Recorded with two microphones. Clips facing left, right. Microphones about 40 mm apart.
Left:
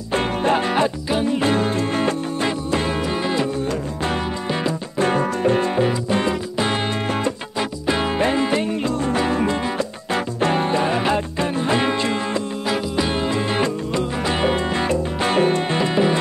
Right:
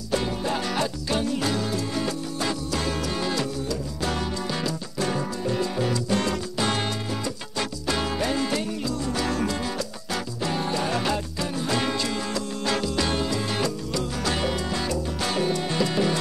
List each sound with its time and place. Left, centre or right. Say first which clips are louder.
0.1 s music: left 7 dB; left
5.0 s music: left 9 dB; left
5.9 s music: left 4 dB; left
7.8 s music: left 7 dB; left
10.1 s music: left 8 dB; left
12.6 s music: left 2 dB; centre